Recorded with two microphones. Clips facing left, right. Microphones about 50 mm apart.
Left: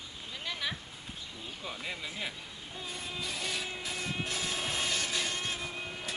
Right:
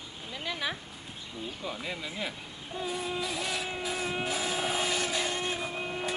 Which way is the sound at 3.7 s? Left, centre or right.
Centre.